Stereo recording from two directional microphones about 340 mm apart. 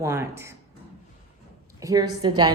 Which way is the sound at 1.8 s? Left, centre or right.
Centre.